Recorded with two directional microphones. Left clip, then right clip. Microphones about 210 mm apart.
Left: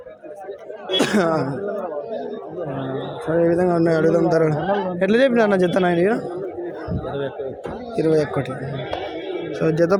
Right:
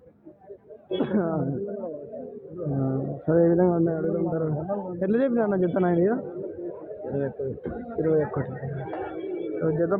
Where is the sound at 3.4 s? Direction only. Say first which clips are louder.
Left 4 dB; 15° left (ahead or behind).